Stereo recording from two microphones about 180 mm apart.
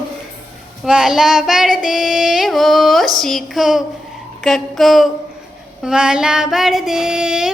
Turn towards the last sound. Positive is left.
turn(degrees=-5)  # may be behind; listen again after turning